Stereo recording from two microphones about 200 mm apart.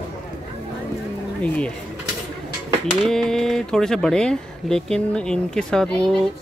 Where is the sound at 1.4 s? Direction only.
5° left (ahead or behind).